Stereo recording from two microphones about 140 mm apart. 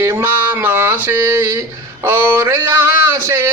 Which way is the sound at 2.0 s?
15° right (ahead or behind).